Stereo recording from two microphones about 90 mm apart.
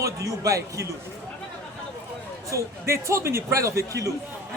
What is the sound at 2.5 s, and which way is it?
Speech, 35° right (ahead or behind).